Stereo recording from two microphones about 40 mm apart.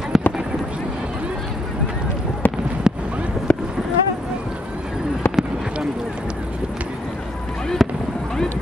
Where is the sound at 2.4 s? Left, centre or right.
Left.